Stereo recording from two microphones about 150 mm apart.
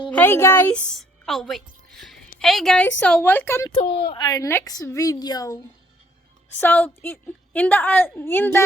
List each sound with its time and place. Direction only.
0.1 s speech: 15° left (ahead or behind)
0.9 s a woman's voice: centre (ahead or behind)
1.9 s a sound: centre (ahead or behind)
2.4 s a woman's voice: 5° left (ahead or behind)
3.8 s speech: 90° left
4.1 s a child's voice: 30° left (ahead or behind)
6.6 s a woman's voice: 10° left (ahead or behind)